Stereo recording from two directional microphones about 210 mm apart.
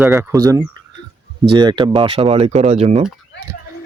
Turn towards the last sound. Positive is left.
turn(degrees=-30)  # may be behind; listen again after turning